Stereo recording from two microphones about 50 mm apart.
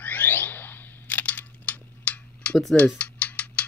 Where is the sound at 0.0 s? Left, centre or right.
Left.